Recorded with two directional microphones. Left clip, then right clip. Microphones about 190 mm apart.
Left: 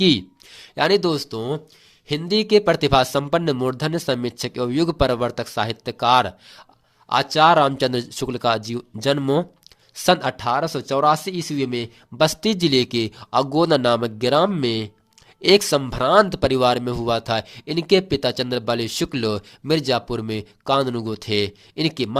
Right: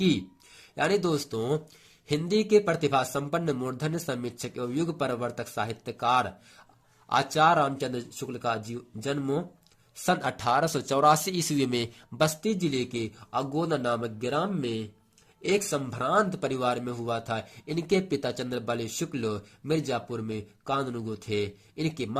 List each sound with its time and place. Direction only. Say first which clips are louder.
0.8 s speech: left 8 dB; 35° left (ahead or behind)
10.1 s speech: left 7 dB; 25° left (ahead or behind)
12.2 s speech: left 8 dB; 40° left (ahead or behind)